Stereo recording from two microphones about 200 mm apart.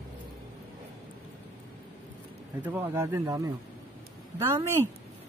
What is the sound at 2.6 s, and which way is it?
Speech, 10° right (ahead or behind).